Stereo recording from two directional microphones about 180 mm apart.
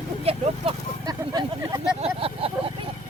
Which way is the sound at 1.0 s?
20° right (ahead or behind).